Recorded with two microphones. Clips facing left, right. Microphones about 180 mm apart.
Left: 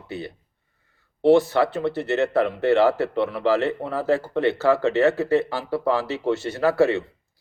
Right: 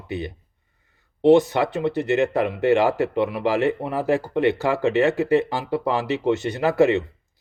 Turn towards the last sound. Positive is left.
turn(degrees=-20)  # may be behind; listen again after turning